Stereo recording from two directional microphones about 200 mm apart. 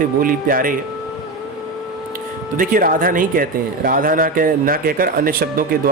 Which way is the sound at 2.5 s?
45° right (ahead or behind).